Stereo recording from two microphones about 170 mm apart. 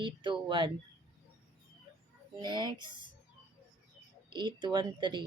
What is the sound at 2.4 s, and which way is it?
Speech, 25° right (ahead or behind).